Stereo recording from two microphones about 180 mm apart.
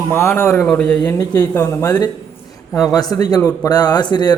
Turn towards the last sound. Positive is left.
turn(degrees=25)  # may be behind; listen again after turning